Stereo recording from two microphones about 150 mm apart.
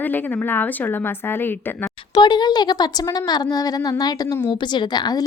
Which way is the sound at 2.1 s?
30° left (ahead or behind).